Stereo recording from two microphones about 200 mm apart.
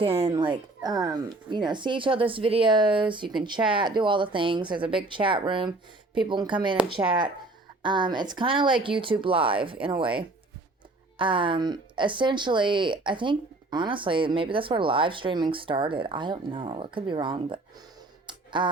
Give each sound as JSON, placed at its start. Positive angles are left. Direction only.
{"t": 0.0, "sound": "speech", "side_deg": -30}
{"t": 11.2, "sound": "speech", "side_deg": -25}
{"t": 18.3, "sound": "music", "side_deg": -25}